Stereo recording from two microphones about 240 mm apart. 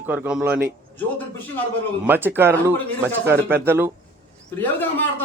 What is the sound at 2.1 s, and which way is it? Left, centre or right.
Speech, centre.